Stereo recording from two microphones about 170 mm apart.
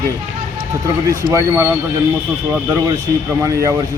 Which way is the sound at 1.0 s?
20° right (ahead or behind).